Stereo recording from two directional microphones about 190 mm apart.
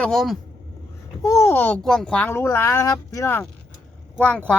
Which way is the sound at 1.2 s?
15° left (ahead or behind).